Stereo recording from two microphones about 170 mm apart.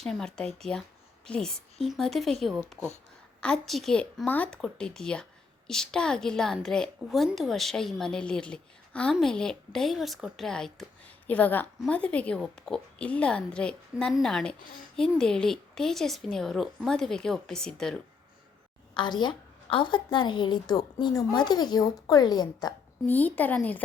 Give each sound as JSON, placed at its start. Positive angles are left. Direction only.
{"t": 0.0, "sound": "a woman's voice", "side_deg": 5}
{"t": 3.4, "sound": "a woman's voice", "side_deg": 5}
{"t": 18.9, "sound": "a woman's voice", "side_deg": 25}
{"t": 23.0, "sound": "a woman's voice", "side_deg": 10}